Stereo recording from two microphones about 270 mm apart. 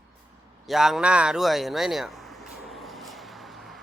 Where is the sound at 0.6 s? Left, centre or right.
Centre.